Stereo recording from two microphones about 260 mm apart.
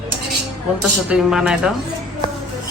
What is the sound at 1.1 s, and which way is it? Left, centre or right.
Speech, centre.